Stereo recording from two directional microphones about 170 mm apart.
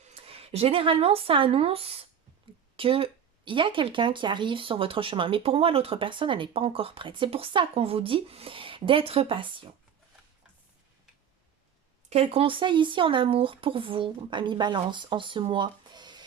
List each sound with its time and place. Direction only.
0.0 s speech: 35° right (ahead or behind)
12.0 s speech: 35° right (ahead or behind)